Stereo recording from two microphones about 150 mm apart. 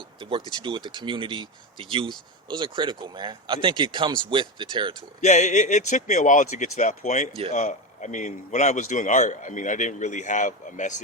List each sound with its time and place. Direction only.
0.2 s speech: 35° right (ahead or behind)
5.2 s a man's voice: 50° left (ahead or behind)